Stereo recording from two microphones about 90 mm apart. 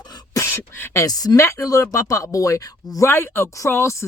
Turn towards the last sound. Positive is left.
turn(degrees=30)  # may be behind; listen again after turning